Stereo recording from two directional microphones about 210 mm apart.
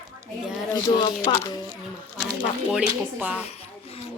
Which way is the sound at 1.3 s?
25° left (ahead or behind).